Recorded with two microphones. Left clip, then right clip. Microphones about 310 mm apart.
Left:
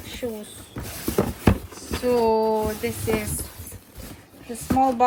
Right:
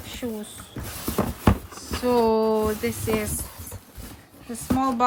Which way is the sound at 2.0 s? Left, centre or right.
Right.